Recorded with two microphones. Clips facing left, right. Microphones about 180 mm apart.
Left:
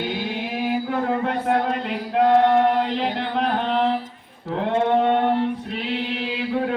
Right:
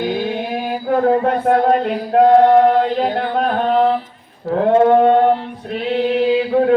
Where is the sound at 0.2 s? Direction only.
45° right (ahead or behind).